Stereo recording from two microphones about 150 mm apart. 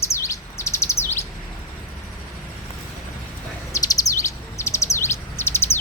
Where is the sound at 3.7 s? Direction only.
20° left (ahead or behind).